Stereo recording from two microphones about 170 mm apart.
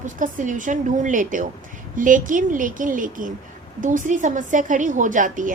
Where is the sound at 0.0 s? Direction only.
50° right (ahead or behind).